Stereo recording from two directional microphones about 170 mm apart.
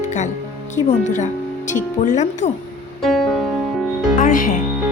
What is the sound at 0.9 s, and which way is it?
Speech, 45° left (ahead or behind).